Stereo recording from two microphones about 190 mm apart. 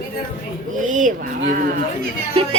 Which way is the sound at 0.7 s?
40° right (ahead or behind).